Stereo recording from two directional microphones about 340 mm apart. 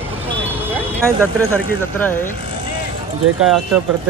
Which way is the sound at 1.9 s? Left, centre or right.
Centre.